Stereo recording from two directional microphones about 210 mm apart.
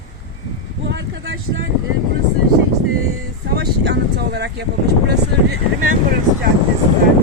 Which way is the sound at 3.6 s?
50° right (ahead or behind).